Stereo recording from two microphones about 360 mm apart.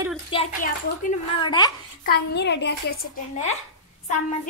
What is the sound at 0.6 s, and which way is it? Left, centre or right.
Speech, left.